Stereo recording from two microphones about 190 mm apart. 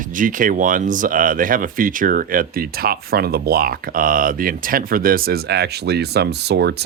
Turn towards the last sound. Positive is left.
turn(degrees=-60)  # may be behind; listen again after turning